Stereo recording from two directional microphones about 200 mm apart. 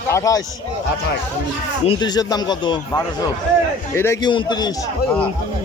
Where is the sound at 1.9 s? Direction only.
20° left (ahead or behind).